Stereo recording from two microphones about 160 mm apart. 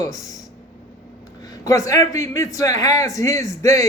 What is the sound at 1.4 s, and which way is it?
A man's voice, 20° left (ahead or behind).